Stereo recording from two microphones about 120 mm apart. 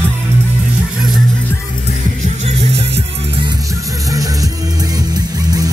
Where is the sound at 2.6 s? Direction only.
50° right (ahead or behind).